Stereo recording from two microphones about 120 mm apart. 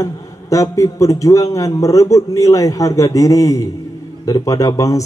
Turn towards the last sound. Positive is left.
turn(degrees=25)  # may be behind; listen again after turning